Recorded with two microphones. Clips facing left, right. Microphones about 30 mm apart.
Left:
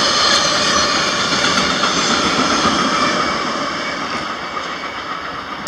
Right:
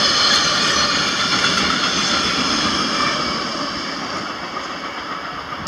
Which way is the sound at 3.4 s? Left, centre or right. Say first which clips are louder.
Left 4 dB; left.